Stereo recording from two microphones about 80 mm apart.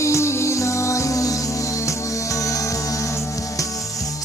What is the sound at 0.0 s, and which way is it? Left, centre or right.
Music, left.